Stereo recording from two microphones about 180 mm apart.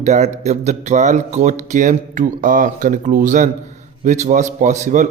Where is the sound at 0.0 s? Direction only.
40° right (ahead or behind).